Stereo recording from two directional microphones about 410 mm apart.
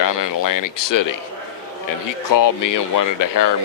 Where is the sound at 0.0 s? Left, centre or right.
Left.